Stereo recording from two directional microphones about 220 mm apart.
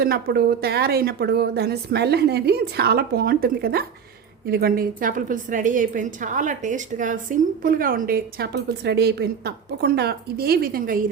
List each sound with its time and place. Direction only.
0.0 s a woman's voice: 45° right (ahead or behind)